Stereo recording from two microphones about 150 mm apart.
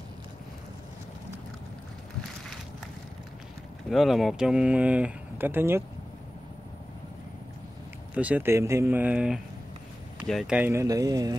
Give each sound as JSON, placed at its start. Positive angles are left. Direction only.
{"t": 3.9, "sound": "speech", "side_deg": 0}
{"t": 8.1, "sound": "speech", "side_deg": -10}
{"t": 10.7, "sound": "speech", "side_deg": -20}